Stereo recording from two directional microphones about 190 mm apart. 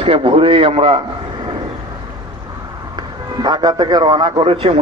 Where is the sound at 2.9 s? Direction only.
20° right (ahead or behind).